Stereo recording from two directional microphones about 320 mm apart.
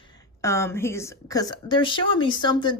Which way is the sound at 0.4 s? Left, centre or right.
Centre.